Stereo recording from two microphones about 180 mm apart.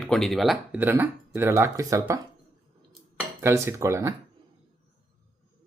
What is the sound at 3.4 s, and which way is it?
Speech, 15° right (ahead or behind).